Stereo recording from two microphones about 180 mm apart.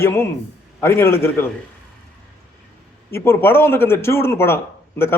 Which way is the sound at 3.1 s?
15° left (ahead or behind).